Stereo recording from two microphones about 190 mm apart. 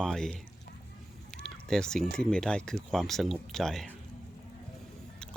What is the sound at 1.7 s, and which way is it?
Speech, 5° left (ahead or behind).